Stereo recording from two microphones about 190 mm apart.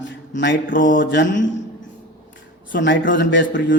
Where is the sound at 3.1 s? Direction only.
70° left (ahead or behind).